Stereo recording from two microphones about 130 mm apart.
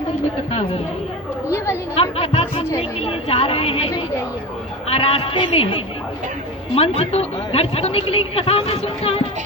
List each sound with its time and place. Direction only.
2.0 s chatter: 45° left (ahead or behind)
3.0 s a woman's voice: 45° left (ahead or behind)